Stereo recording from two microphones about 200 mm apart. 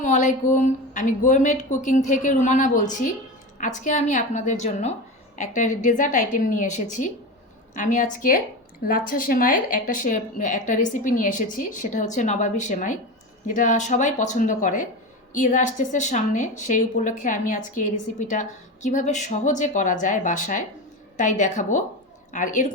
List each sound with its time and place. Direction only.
0.0 s a woman's voice: 40° left (ahead or behind)